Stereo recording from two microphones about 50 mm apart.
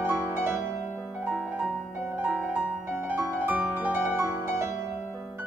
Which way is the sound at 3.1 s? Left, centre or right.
Right.